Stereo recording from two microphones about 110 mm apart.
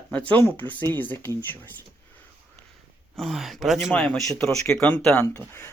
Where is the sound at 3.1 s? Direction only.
Centre (ahead or behind); by 5.7 s 20° left (ahead or behind).